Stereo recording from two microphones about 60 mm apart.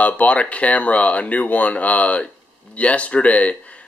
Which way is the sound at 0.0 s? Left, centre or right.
Left.